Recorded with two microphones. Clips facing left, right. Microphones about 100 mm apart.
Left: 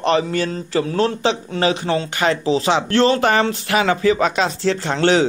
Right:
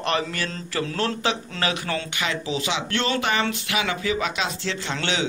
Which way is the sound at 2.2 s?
35° left (ahead or behind).